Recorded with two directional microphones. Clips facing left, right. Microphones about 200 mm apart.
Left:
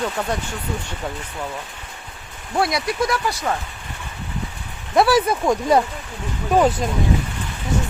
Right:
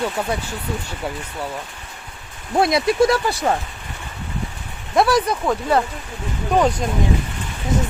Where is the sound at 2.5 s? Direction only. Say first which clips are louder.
Right 4 dB; 25° right (ahead or behind).